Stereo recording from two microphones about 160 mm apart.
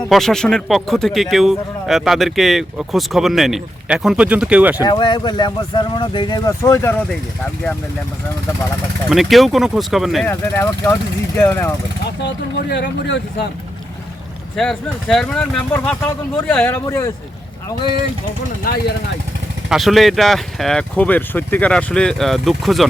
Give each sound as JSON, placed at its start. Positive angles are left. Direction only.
{"t": 0.1, "sound": "speech", "side_deg": 0}
{"t": 4.8, "sound": "speech", "side_deg": 30}
{"t": 9.0, "sound": "speech", "side_deg": 0}
{"t": 10.2, "sound": "speech", "side_deg": 15}
{"t": 12.7, "sound": "speech", "side_deg": 90}
{"t": 14.5, "sound": "speech", "side_deg": 5}
{"t": 18.7, "sound": "speech", "side_deg": 65}
{"t": 19.7, "sound": "speech", "side_deg": 0}